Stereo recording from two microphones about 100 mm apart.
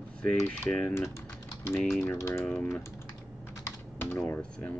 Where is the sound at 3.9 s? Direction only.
25° left (ahead or behind).